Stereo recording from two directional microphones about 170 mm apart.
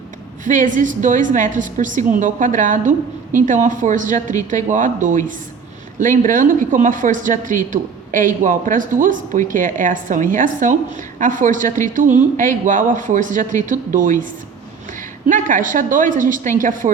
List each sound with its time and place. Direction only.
0.4 s speech: 50° right (ahead or behind)